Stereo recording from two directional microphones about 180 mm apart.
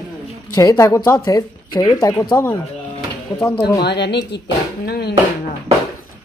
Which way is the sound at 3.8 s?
65° left (ahead or behind).